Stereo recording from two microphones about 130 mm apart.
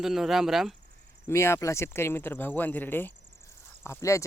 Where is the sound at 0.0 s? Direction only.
Centre (ahead or behind).